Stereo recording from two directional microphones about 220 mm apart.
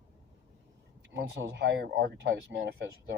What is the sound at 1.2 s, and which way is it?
Speech, 50° right (ahead or behind).